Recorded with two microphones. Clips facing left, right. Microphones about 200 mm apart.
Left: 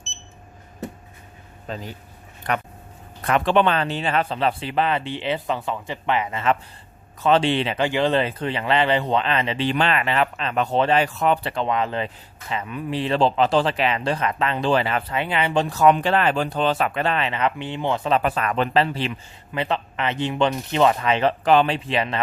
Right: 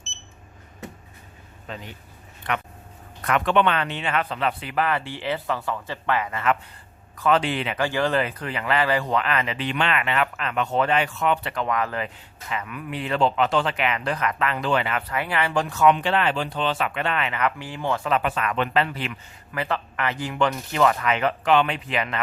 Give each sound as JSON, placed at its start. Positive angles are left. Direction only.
{"t": 1.6, "sound": "speech", "side_deg": 35}
{"t": 15.7, "sound": "speech", "side_deg": 40}
{"t": 18.2, "sound": "speech", "side_deg": 35}